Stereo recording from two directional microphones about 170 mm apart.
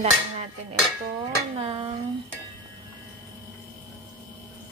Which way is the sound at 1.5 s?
30° right (ahead or behind).